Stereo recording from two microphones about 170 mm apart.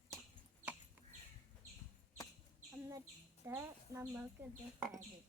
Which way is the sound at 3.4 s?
15° right (ahead or behind).